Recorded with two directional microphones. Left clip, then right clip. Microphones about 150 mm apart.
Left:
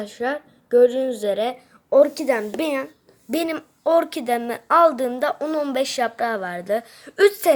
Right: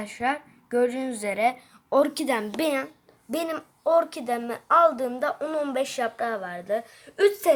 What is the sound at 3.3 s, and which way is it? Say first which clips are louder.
A woman's voice: left 4 dB; 25° left (ahead or behind).